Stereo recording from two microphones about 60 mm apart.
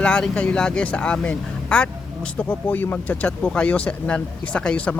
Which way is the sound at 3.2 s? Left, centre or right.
Centre.